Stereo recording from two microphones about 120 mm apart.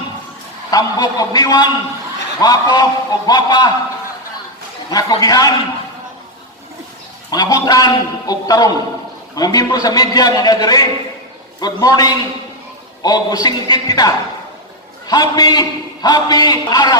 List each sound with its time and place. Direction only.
0.7 s a man's voice: 30° left (ahead or behind)
4.9 s a man's voice: 30° left (ahead or behind)
7.3 s a man's voice: 35° left (ahead or behind)